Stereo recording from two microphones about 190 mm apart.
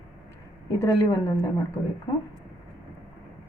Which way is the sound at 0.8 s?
20° left (ahead or behind).